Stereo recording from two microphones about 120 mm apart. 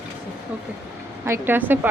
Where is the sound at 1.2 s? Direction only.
20° right (ahead or behind).